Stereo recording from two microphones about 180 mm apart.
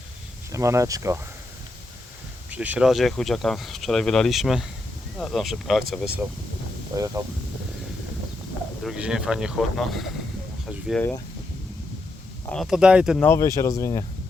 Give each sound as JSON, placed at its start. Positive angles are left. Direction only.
{"t": 0.5, "sound": "speech", "side_deg": -15}
{"t": 2.5, "sound": "speech", "side_deg": -5}
{"t": 6.9, "sound": "speech", "side_deg": -20}
{"t": 8.8, "sound": "speech", "side_deg": -5}
{"t": 12.5, "sound": "speech", "side_deg": 0}
{"t": 13.1, "sound": "speech", "side_deg": 15}